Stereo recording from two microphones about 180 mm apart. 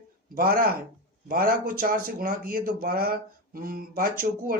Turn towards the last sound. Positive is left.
turn(degrees=-55)  # may be behind; listen again after turning